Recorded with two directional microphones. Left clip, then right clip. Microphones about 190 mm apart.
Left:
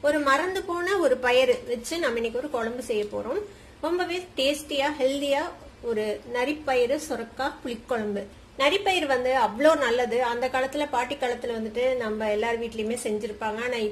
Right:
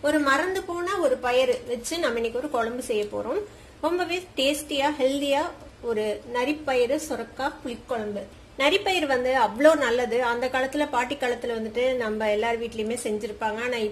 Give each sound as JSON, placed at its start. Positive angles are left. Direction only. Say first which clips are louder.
{"t": 0.0, "sound": "a woman's voice", "louder": "even", "side_deg": 0}
{"t": 0.8, "sound": "a woman's voice", "louder": "left 2 dB", "side_deg": 25}
{"t": 1.7, "sound": "a woman's voice", "louder": "right 1 dB", "side_deg": 0}
{"t": 8.5, "sound": "a woman's voice", "louder": "even", "side_deg": 0}